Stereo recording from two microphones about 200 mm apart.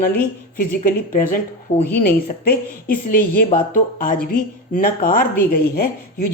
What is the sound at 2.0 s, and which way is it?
Speech, 45° left (ahead or behind).